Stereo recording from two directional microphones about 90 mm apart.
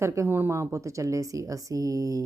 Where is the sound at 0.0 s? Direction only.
30° right (ahead or behind).